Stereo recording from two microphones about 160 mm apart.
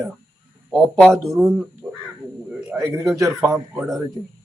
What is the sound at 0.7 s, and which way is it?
Speech, centre (ahead or behind).